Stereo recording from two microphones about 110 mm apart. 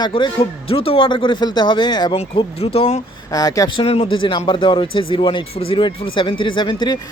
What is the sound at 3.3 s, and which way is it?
Speech, 30° left (ahead or behind).